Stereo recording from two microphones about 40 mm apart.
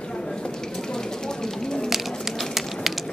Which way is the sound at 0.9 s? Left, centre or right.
Centre.